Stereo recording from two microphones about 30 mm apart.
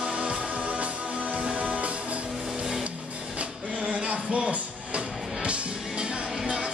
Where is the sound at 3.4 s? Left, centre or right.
Right.